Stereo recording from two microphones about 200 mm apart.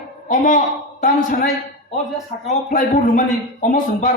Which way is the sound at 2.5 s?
40° left (ahead or behind).